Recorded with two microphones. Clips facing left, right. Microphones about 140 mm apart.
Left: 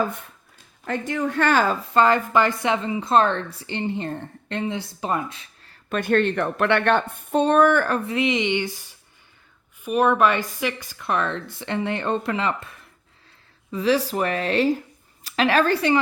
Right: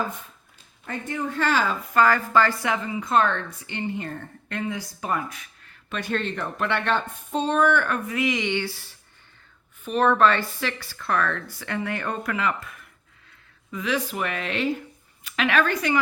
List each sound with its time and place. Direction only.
0.9 s speech: 85° left; by 1.7 s 55° left (ahead or behind)
1.9 s a woman's voice: 25° left (ahead or behind)
5.9 s speech: 55° left (ahead or behind)
7.9 s a woman's voice: 30° left (ahead or behind)